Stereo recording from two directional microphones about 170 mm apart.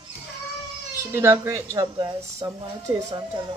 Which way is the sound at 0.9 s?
15° right (ahead or behind).